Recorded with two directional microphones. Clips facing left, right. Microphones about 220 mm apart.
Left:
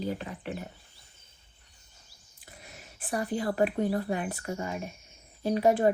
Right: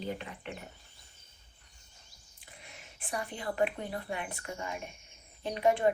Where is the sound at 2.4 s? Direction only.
40° left (ahead or behind).